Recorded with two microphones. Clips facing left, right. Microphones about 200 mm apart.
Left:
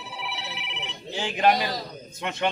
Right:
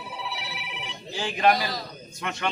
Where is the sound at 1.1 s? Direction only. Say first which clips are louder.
Even; 20° left (ahead or behind).